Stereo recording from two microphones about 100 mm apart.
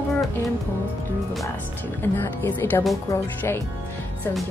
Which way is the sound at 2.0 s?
20° left (ahead or behind).